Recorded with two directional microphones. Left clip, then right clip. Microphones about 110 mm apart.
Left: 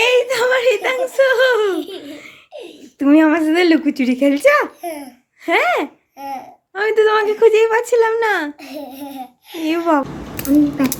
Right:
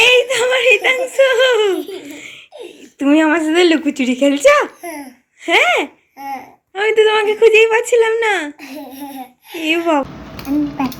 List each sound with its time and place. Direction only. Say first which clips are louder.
0.0 s whimper: right 3 dB; 25° left (ahead or behind)
0.3 s whimper: right 2 dB; 35° left (ahead or behind)
1.0 s speech: left 3 dB; 30° left (ahead or behind)
5.5 s speech: right 3 dB; 30° left (ahead or behind)